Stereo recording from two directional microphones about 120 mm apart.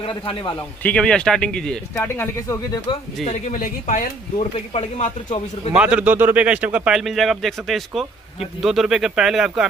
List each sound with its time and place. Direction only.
0.0 s a man's voice: 45° left (ahead or behind)
0.8 s speech: 10° left (ahead or behind)
2.0 s speech: 25° left (ahead or behind)
3.3 s speech: 80° left
4.4 s speech: 60° left (ahead or behind)
5.7 s speech: 10° right (ahead or behind)